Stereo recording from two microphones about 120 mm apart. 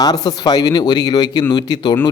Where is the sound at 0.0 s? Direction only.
30° left (ahead or behind).